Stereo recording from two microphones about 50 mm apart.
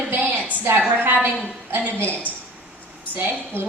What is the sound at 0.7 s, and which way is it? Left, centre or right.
Speech, right.